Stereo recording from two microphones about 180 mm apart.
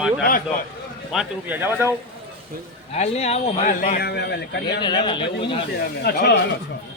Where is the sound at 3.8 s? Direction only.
55° left (ahead or behind).